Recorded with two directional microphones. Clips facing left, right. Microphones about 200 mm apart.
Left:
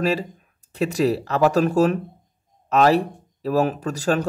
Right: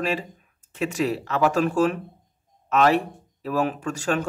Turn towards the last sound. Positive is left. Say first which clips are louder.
# left 3 dB
turn(degrees=35)  # may be behind; listen again after turning